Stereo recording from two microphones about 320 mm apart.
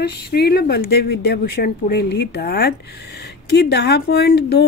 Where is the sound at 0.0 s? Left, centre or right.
Left.